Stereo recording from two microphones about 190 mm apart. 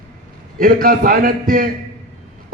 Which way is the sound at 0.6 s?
50° right (ahead or behind).